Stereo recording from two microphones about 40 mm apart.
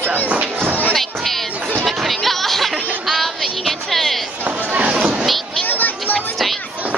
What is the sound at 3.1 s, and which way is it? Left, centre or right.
Music, centre.